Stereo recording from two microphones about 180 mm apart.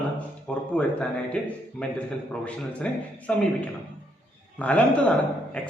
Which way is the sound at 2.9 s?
5° left (ahead or behind).